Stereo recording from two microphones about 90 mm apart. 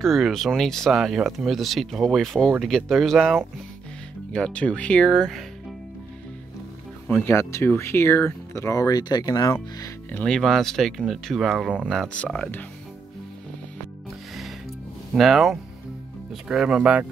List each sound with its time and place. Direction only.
0.0 s speech: centre (ahead or behind)
7.1 s speech: 25° left (ahead or behind); by 9.5 s 50° left (ahead or behind)
10.2 s speech: 5° left (ahead or behind)
12.1 s speech: 10° left (ahead or behind)
15.1 s speech: 5° right (ahead or behind)